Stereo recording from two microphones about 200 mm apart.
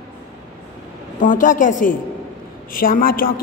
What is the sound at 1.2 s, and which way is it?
A woman's voice, 40° left (ahead or behind).